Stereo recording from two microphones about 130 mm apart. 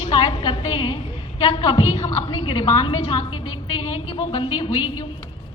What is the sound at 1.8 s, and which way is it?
Speech, 55° left (ahead or behind).